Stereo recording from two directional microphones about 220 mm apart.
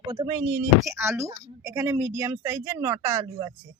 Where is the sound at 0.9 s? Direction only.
10° right (ahead or behind).